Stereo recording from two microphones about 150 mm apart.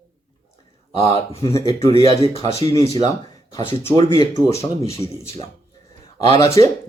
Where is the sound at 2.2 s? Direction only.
40° left (ahead or behind).